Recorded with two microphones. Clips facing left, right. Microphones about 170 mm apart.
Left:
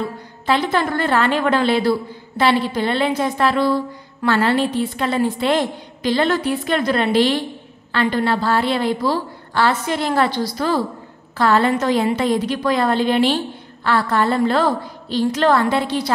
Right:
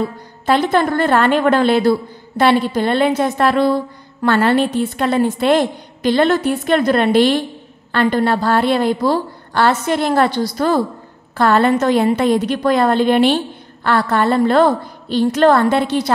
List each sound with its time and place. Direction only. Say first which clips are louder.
0.5 s a woman's voice: right 4 dB; 45° right (ahead or behind)